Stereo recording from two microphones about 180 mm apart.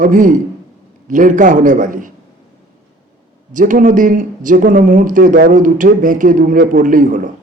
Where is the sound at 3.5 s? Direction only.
45° right (ahead or behind).